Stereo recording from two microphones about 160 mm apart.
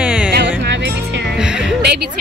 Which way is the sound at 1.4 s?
5° right (ahead or behind).